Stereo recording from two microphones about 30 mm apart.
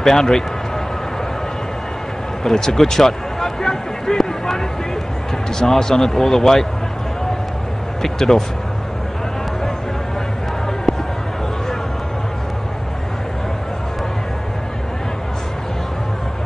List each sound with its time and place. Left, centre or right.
0.0 s speech: centre
2.4 s a sound: centre
5.6 s speech: centre
8.0 s speech: centre